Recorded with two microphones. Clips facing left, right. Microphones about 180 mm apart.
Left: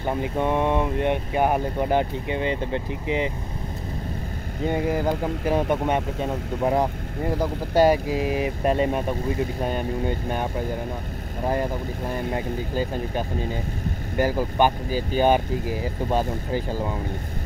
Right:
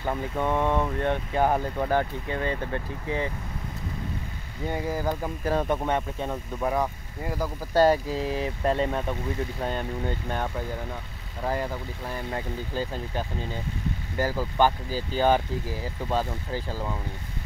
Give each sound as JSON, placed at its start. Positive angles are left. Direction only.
{"t": 0.0, "sound": "speech", "side_deg": 15}
{"t": 4.6, "sound": "speech", "side_deg": 20}
{"t": 6.6, "sound": "speech", "side_deg": 30}
{"t": 7.7, "sound": "speech", "side_deg": 15}
{"t": 12.1, "sound": "speech", "side_deg": 15}